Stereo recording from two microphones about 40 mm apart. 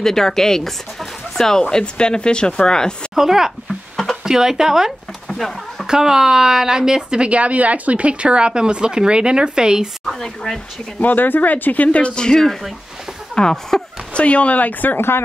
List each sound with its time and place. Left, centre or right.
0.0 s speech: centre
3.2 s speech: centre
3.9 s a sound: centre
4.2 s speech: centre
5.3 s a sound: centre
5.9 s speech: centre
7.0 s speech: right
10.1 s speech: centre
11.0 s speech: left
12.0 s speech: left
14.1 s speech: left
15.0 s speech: left